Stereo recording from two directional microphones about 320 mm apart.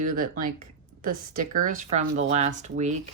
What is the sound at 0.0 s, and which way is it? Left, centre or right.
Speech, right.